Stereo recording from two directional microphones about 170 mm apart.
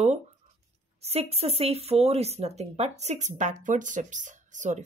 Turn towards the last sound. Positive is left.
turn(degrees=-45)  # may be behind; listen again after turning